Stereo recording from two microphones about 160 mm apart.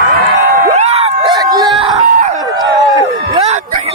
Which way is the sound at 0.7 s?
40° right (ahead or behind).